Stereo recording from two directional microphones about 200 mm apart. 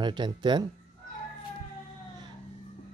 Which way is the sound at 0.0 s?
20° right (ahead or behind).